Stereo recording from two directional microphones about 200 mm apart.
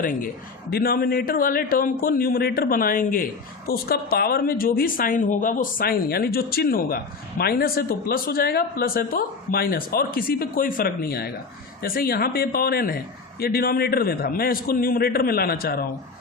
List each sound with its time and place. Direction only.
0.0 s speech: 45° left (ahead or behind)